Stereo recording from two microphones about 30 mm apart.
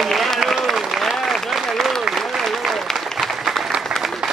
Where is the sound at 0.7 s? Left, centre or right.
Centre.